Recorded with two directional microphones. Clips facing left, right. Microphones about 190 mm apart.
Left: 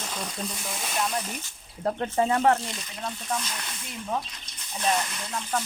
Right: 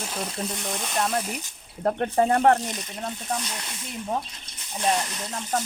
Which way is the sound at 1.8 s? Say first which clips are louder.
Right 3 dB; 55° right (ahead or behind).